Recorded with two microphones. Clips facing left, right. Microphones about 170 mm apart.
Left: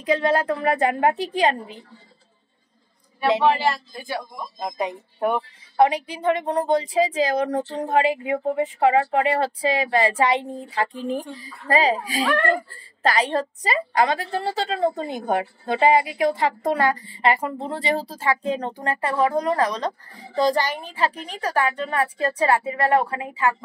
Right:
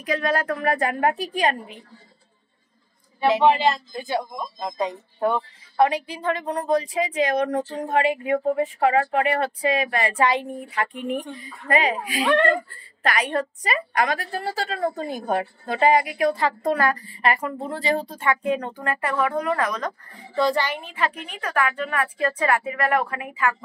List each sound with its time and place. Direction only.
0.0 s a woman's voice: 25° left (ahead or behind)
3.2 s speech: 20° right (ahead or behind)
4.6 s a woman's voice: 20° left (ahead or behind)